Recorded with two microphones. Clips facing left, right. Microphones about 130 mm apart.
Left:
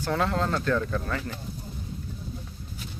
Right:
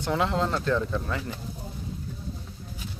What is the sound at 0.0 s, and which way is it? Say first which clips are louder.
Speech: right 1 dB; 15° right (ahead or behind).